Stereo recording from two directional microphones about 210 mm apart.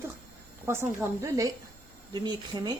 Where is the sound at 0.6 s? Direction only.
10° right (ahead or behind).